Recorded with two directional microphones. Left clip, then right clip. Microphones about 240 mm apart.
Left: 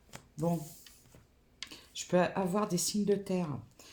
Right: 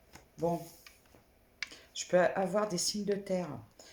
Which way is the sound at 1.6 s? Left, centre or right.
Left.